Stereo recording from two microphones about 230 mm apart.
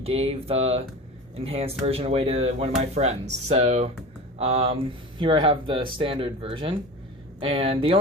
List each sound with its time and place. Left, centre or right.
0.0 s speech: right